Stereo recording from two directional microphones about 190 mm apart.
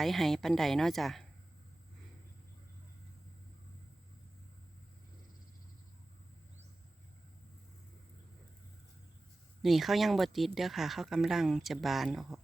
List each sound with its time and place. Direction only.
0.0 s speech: centre (ahead or behind)
9.6 s speech: centre (ahead or behind)